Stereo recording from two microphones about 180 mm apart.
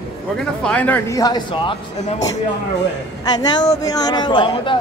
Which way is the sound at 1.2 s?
25° left (ahead or behind).